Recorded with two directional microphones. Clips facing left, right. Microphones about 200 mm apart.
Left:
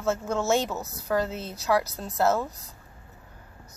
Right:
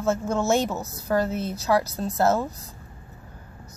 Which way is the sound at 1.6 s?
Centre (ahead or behind).